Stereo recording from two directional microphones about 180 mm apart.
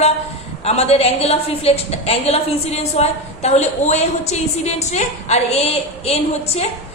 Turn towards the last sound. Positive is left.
turn(degrees=35)  # may be behind; listen again after turning